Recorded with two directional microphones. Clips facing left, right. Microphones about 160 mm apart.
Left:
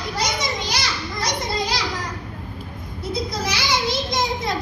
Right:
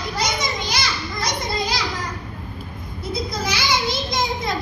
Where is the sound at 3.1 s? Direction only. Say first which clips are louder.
Even; 35° left (ahead or behind).